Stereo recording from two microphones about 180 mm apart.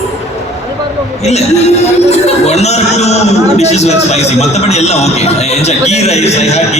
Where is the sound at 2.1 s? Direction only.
35° left (ahead or behind).